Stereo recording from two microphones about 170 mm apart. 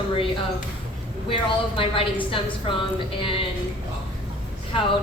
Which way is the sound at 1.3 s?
30° left (ahead or behind).